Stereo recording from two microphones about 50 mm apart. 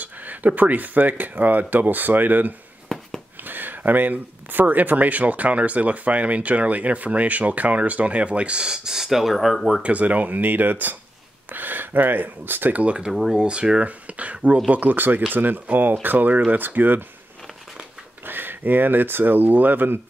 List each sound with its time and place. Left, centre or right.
0.0 s speech: right
2.9 s a sound: centre
3.4 s speech: right; by 9.8 s centre
9.8 s speech: right
13.1 s speech: centre
13.4 s speech: centre; by 17.0 s right
18.2 s speech: right